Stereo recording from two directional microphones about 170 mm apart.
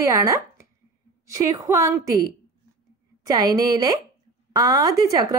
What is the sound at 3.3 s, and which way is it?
A woman's voice, 20° right (ahead or behind).